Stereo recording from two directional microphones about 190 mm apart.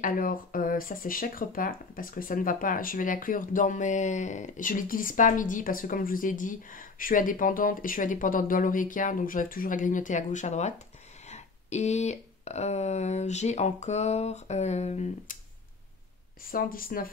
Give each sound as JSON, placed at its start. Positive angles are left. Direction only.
{"t": 0.0, "sound": "speech", "side_deg": 50}
{"t": 16.4, "sound": "speech", "side_deg": 50}